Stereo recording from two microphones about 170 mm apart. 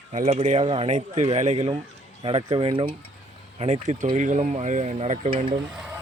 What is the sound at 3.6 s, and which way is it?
Speech, 45° right (ahead or behind).